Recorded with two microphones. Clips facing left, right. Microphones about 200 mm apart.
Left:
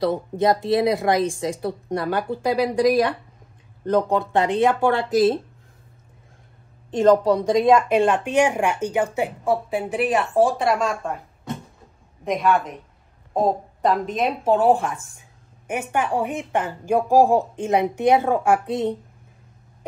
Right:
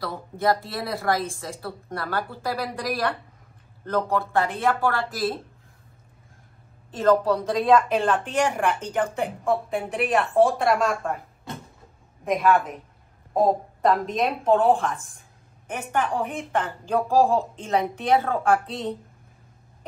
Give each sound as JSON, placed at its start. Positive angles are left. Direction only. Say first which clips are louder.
{"t": 0.0, "sound": "speech", "louder": "left 6 dB", "side_deg": 20}
{"t": 6.9, "sound": "speech", "louder": "left 4 dB", "side_deg": 15}
{"t": 12.3, "sound": "a woman's voice", "louder": "even", "side_deg": 0}